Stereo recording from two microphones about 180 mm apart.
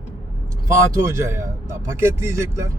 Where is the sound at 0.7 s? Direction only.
15° right (ahead or behind).